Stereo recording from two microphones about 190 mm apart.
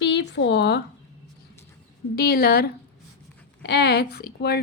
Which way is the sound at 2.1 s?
55° left (ahead or behind).